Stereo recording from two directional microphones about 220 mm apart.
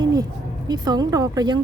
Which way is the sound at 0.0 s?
15° right (ahead or behind).